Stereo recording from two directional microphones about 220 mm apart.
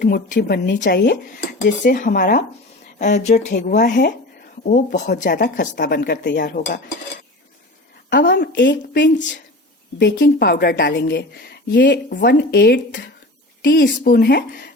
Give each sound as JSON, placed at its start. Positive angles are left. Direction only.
{"t": 0.0, "sound": "speech", "side_deg": 45}
{"t": 3.5, "sound": "speech", "side_deg": 45}
{"t": 8.1, "sound": "speech", "side_deg": 50}